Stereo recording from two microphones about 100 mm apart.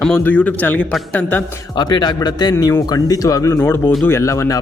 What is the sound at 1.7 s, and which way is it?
A man's voice, 45° left (ahead or behind).